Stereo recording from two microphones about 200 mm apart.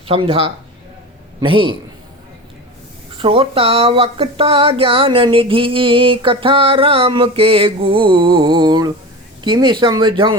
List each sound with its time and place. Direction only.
0.1 s speech: 30° right (ahead or behind)
3.2 s speech: 25° right (ahead or behind)